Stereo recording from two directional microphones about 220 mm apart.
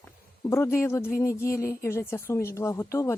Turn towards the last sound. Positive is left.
turn(degrees=15)  # may be behind; listen again after turning